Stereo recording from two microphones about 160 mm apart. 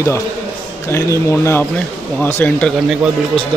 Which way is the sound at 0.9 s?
15° left (ahead or behind).